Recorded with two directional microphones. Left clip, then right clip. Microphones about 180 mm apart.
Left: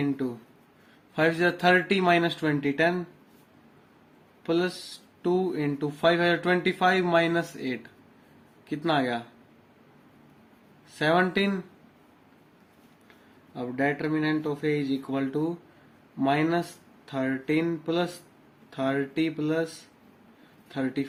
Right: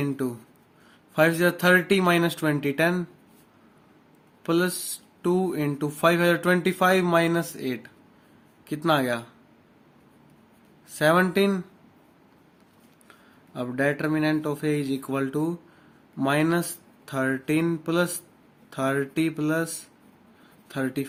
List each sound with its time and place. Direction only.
0.0 s speech: 45° right (ahead or behind)
4.4 s speech: 45° right (ahead or behind)
10.9 s speech: 40° right (ahead or behind)
13.5 s speech: 45° right (ahead or behind)